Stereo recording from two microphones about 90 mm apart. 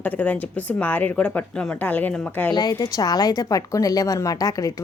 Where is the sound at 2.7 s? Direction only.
40° left (ahead or behind).